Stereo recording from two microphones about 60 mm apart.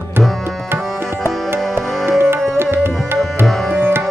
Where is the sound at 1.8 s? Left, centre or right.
Right.